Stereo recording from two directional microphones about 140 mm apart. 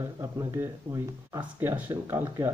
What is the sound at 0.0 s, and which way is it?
Speech, 25° right (ahead or behind).